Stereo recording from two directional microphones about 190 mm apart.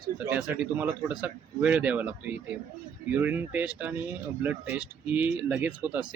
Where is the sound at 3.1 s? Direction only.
10° right (ahead or behind).